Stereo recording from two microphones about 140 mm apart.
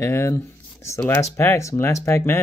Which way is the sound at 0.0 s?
20° left (ahead or behind).